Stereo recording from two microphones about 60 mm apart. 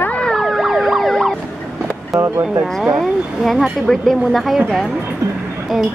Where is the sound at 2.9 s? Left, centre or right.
Centre.